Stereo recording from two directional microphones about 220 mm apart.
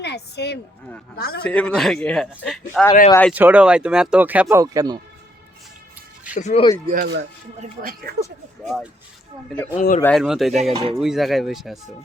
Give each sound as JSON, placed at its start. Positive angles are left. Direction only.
{"t": 0.0, "sound": "a woman's voice", "side_deg": 50}
{"t": 1.5, "sound": "a man's voice", "side_deg": 5}
{"t": 3.3, "sound": "speech", "side_deg": -5}
{"t": 6.3, "sound": "speech", "side_deg": 30}
{"t": 6.9, "sound": "speech", "side_deg": -45}
{"t": 8.6, "sound": "a man's voice", "side_deg": 0}
{"t": 9.7, "sound": "speech", "side_deg": 35}
{"t": 10.0, "sound": "a man's voice", "side_deg": 5}
{"t": 10.7, "sound": "speech", "side_deg": -25}
{"t": 10.9, "sound": "a man's voice", "side_deg": 0}